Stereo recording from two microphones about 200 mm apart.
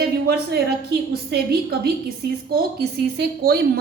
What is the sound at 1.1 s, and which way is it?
A woman's voice, 50° right (ahead or behind).